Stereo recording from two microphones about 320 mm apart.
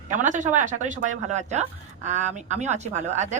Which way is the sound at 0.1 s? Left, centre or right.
Right.